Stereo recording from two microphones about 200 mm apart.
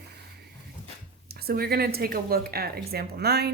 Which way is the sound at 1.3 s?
50° right (ahead or behind).